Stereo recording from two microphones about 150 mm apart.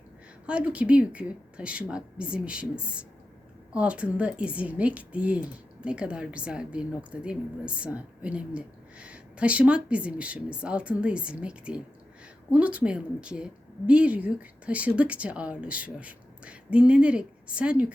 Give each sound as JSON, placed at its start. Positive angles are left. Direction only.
{"t": 0.4, "sound": "a woman's voice", "side_deg": -10}